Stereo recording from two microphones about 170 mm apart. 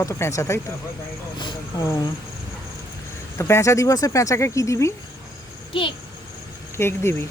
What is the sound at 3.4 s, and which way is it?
Speech, 15° left (ahead or behind).